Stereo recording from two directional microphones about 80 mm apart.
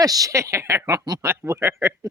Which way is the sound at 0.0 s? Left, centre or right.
Right.